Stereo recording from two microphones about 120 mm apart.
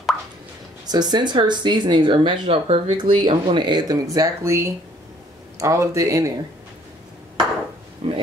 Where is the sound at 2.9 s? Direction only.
40° right (ahead or behind).